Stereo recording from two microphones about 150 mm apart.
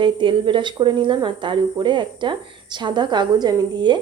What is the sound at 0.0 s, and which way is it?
Speech, 35° right (ahead or behind).